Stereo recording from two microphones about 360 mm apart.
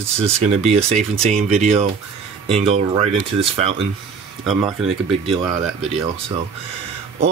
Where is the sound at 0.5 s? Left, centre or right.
Centre.